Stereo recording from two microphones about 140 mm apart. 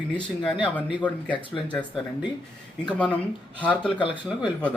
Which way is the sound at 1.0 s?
10° left (ahead or behind).